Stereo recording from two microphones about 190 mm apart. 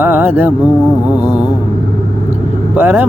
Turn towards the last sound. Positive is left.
turn(degrees=-10)  # may be behind; listen again after turning